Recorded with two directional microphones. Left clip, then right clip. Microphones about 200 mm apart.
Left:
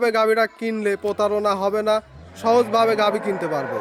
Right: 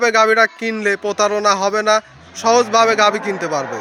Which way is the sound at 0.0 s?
Centre (ahead or behind).